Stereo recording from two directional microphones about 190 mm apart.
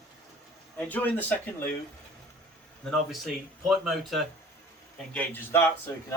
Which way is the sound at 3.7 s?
Centre (ahead or behind).